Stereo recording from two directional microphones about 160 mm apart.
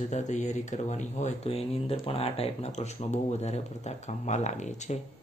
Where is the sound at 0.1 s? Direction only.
45° left (ahead or behind).